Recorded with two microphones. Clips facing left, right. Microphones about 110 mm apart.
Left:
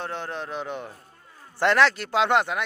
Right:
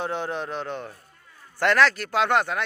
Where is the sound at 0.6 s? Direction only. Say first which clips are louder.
Even; 15° left (ahead or behind).